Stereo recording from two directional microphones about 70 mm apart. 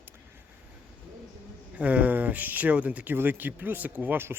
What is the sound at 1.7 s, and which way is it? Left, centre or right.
Speech, right.